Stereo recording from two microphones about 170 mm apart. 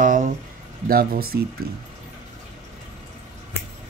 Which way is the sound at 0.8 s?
60° right (ahead or behind).